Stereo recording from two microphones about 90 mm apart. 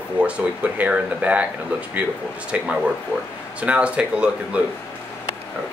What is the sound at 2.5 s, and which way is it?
Speech, 15° right (ahead or behind).